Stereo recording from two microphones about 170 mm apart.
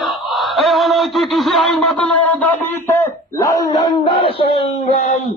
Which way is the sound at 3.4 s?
25° left (ahead or behind).